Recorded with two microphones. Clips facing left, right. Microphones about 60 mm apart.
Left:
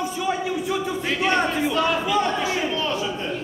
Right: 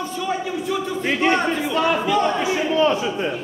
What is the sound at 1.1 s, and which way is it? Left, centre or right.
A man's voice, centre.